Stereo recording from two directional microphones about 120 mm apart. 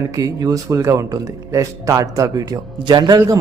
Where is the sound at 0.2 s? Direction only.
30° right (ahead or behind).